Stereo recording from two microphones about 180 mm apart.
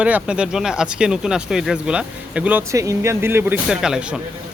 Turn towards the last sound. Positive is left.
turn(degrees=-5)  # may be behind; listen again after turning